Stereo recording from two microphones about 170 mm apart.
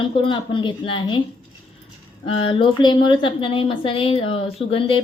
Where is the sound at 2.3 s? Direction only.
30° left (ahead or behind).